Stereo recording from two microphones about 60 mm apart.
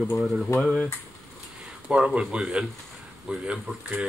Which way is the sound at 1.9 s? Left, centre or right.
Centre.